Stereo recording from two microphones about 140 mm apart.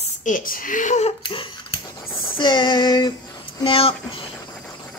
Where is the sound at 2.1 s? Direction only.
15° left (ahead or behind).